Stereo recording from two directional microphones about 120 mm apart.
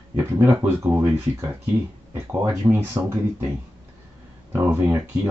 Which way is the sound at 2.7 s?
25° right (ahead or behind).